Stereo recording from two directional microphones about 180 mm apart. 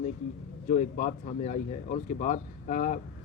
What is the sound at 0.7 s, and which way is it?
Speech, 45° left (ahead or behind).